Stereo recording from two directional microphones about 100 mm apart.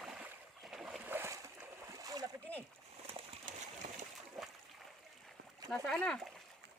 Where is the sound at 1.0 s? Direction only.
20° right (ahead or behind).